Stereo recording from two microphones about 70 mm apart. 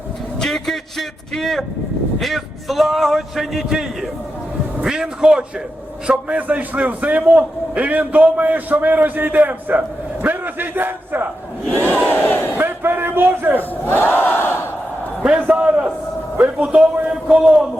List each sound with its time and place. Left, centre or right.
0.3 s a man's voice: centre; by 11.3 s right
11.9 s battle cry: left
12.5 s a sound: right
13.6 s crowd: left
15.4 s a man's voice: centre